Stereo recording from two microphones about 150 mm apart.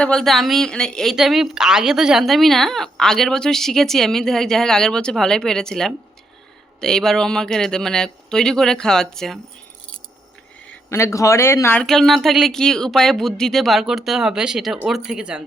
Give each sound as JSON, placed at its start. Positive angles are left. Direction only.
{"t": 0.0, "sound": "a woman's voice", "side_deg": 5}
{"t": 10.8, "sound": "speech", "side_deg": 20}
{"t": 11.8, "sound": "a woman's voice", "side_deg": 0}